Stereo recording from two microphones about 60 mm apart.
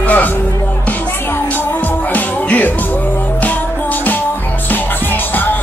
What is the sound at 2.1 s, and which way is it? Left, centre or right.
Music, left.